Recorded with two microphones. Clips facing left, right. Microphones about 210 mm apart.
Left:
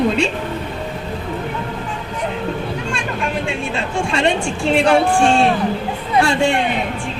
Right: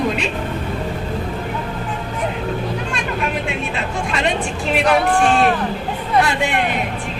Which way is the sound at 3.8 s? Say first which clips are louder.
Left 3 dB; 30° left (ahead or behind).